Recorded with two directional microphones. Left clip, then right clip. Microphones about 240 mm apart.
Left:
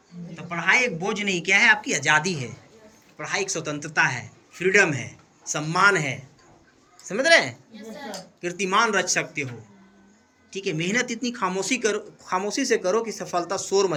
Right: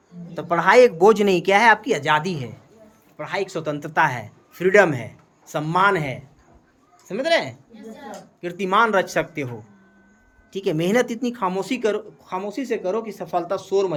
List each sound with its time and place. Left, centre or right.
0.3 s speech: right
10.5 s speech: centre